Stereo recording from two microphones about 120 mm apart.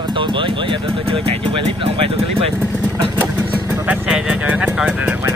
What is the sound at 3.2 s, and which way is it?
Speech, 10° right (ahead or behind).